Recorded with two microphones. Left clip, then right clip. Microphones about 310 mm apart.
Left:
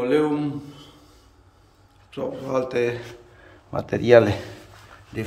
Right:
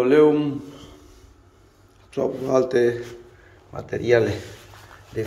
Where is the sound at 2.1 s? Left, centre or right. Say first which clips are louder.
Right 5 dB; centre.